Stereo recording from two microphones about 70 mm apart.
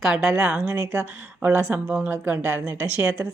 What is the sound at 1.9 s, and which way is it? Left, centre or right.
Speech, right.